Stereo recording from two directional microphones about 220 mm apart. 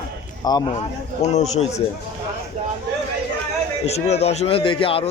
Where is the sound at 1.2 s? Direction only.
30° left (ahead or behind).